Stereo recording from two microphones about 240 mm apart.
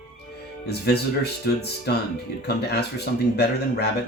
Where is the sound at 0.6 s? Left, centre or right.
Left.